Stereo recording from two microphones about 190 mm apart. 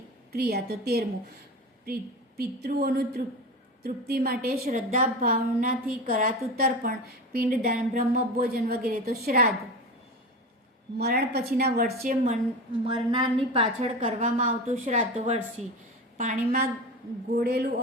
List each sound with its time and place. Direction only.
0.3 s a woman's voice: 55° right (ahead or behind)
10.9 s a woman's voice: 55° right (ahead or behind)
12.9 s a woman's voice: 25° right (ahead or behind); by 16.6 s 45° right (ahead or behind)
17.3 s a woman's voice: 55° right (ahead or behind)